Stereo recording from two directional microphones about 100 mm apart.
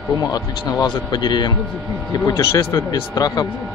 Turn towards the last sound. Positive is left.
turn(degrees=40)  # may be behind; listen again after turning